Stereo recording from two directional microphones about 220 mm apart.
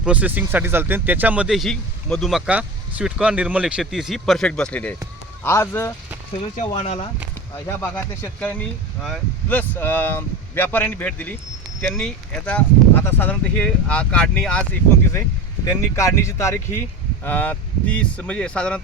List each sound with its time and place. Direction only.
0.0 s speech: 5° right (ahead or behind); by 5.9 s 10° left (ahead or behind)
6.7 s speech: 30° left (ahead or behind)
7.7 s speech: 10° left (ahead or behind)